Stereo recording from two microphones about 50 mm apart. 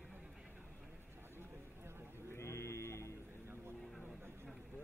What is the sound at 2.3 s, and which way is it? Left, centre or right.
Sheep, left.